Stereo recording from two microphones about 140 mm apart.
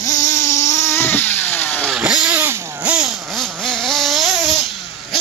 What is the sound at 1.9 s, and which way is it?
Vehicle, 5° right (ahead or behind).